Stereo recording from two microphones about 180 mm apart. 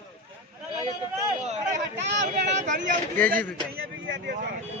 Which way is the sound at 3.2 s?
10° left (ahead or behind).